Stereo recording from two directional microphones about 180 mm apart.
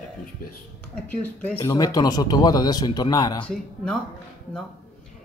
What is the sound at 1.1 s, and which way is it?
Speech, 10° left (ahead or behind).